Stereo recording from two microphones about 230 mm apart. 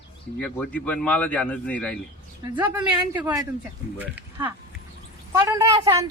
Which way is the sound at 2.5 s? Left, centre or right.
Centre.